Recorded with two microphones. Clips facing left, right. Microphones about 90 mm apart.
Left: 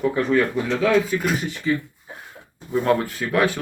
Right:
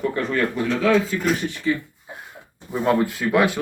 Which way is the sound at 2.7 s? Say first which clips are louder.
Even; 15° right (ahead or behind).